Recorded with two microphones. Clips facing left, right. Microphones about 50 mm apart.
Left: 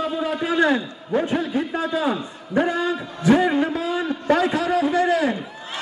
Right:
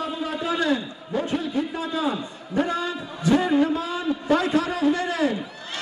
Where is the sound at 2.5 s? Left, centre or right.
Left.